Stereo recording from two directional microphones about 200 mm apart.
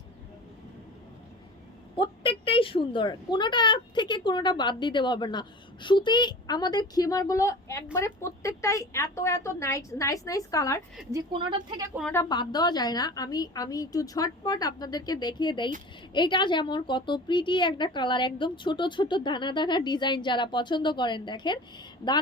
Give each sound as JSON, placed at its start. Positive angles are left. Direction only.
{"t": 2.0, "sound": "a woman's voice", "side_deg": 25}
{"t": 11.1, "sound": "speech", "side_deg": -25}
{"t": 12.1, "sound": "a woman's voice", "side_deg": 20}